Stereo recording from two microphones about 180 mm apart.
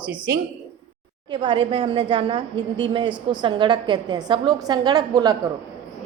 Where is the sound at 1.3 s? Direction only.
25° right (ahead or behind).